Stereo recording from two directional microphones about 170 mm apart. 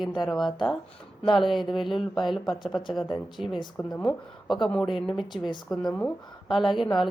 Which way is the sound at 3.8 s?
15° left (ahead or behind).